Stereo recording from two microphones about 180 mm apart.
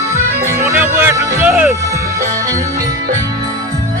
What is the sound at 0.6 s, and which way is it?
Music, 15° right (ahead or behind).